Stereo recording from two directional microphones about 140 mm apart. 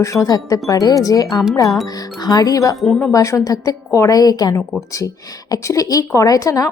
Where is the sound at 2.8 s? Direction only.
5° left (ahead or behind).